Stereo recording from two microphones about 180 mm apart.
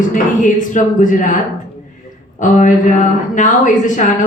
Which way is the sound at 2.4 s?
45° left (ahead or behind).